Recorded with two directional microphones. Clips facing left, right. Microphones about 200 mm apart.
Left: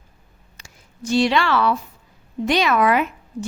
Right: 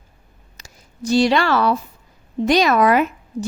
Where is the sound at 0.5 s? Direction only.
35° right (ahead or behind).